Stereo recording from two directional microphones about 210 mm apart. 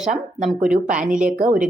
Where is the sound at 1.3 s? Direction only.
40° right (ahead or behind).